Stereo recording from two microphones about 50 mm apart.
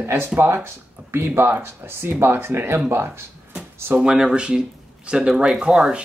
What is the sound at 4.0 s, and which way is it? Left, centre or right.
Speech, centre.